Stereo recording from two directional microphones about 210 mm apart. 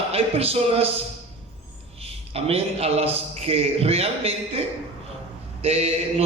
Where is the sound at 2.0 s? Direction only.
30° right (ahead or behind).